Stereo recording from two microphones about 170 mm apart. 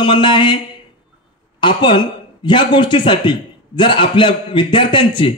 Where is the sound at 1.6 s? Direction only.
25° left (ahead or behind).